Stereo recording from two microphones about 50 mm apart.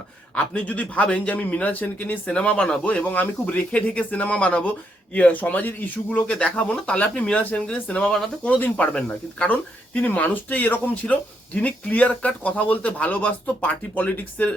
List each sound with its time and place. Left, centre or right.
0.3 s a man's voice: left
8.4 s a man's voice: left